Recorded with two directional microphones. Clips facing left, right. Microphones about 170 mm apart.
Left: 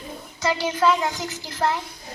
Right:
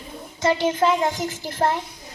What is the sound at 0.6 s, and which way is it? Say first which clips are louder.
Music: left 2 dB; 50° right (ahead or behind).